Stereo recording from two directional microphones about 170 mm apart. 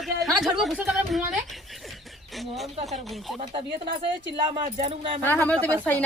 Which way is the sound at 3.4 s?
30° right (ahead or behind).